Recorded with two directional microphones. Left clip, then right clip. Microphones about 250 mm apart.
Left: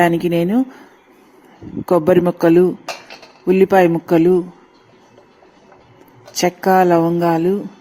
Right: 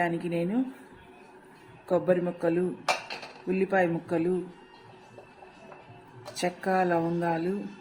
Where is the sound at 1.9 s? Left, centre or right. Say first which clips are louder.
Left 12 dB; left.